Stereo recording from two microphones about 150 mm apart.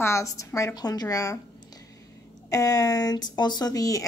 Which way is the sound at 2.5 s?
25° left (ahead or behind).